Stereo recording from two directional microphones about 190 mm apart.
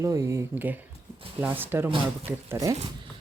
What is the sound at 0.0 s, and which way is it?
Speech, 15° right (ahead or behind).